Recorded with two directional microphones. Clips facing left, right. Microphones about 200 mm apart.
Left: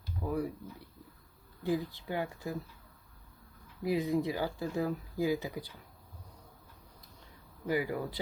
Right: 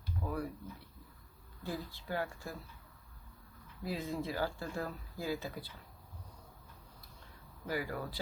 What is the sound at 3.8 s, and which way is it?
Speech, 15° left (ahead or behind).